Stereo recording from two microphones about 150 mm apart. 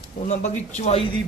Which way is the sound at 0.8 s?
45° left (ahead or behind).